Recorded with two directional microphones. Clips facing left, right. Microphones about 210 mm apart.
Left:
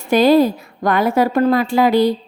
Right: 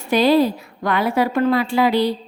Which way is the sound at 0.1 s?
45° left (ahead or behind).